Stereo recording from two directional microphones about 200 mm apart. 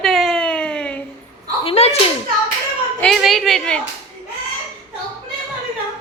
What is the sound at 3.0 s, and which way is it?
Speech, centre (ahead or behind).